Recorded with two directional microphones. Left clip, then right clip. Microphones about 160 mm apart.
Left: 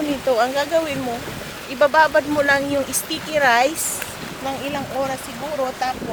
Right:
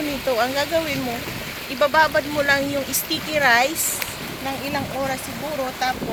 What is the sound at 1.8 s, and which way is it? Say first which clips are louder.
Speech: left 3 dB; 65° left (ahead or behind).